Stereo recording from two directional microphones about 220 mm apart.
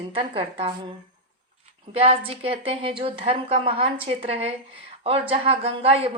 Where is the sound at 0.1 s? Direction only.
25° right (ahead or behind).